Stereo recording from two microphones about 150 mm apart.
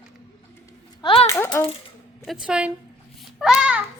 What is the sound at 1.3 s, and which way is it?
Speech, 20° left (ahead or behind).